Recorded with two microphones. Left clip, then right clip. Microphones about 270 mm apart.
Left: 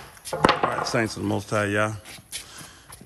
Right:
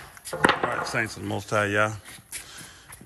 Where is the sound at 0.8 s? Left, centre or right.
Centre.